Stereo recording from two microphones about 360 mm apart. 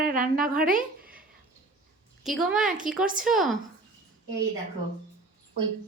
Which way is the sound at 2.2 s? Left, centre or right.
Centre.